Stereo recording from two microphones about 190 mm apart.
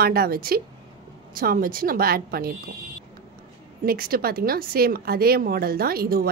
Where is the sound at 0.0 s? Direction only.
55° right (ahead or behind).